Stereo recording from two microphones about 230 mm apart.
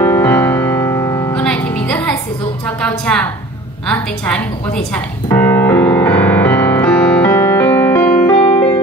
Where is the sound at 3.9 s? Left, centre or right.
Centre.